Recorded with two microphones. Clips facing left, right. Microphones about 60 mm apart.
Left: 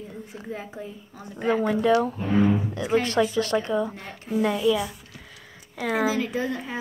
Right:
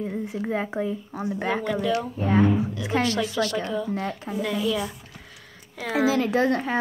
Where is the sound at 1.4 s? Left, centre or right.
Right.